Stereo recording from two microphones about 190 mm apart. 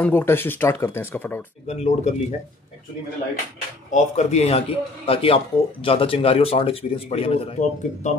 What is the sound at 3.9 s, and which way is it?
Speech, 35° left (ahead or behind).